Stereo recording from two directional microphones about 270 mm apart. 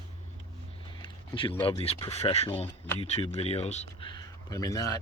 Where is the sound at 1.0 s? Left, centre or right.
Centre.